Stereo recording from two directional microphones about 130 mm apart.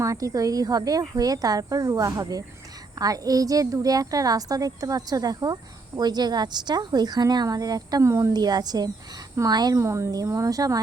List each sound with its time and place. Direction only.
0.0 s a woman's voice: 25° right (ahead or behind)